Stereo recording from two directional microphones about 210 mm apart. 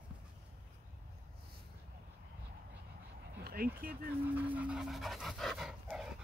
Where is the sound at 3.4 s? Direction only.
45° right (ahead or behind).